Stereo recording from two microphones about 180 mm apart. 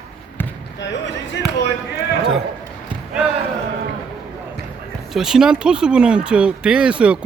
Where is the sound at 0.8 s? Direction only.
80° left.